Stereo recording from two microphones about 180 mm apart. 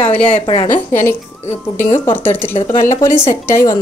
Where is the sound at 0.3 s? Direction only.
35° left (ahead or behind).